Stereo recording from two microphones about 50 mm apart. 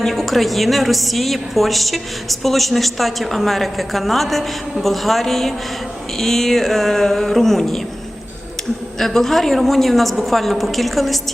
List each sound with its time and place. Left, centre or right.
0.0 s a woman's voice: centre
9.0 s a woman's voice: centre